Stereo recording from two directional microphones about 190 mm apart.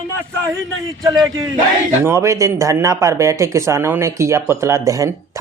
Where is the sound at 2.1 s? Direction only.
15° right (ahead or behind).